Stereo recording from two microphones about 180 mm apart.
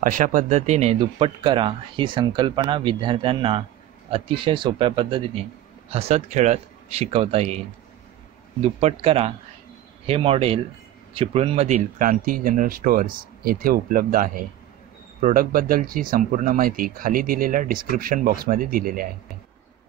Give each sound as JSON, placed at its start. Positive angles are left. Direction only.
{"t": 0.0, "sound": "speech", "side_deg": -45}
{"t": 8.7, "sound": "speech", "side_deg": -30}